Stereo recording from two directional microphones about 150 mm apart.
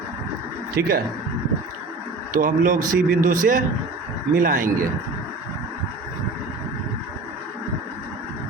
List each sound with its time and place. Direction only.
0.8 s speech: 15° right (ahead or behind)
2.3 s speech: 60° right (ahead or behind)